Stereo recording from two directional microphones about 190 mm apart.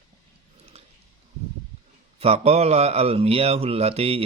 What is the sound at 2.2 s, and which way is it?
Speech, 35° right (ahead or behind).